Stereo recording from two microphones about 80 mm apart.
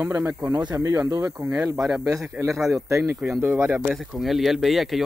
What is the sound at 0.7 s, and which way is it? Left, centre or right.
Speech, right.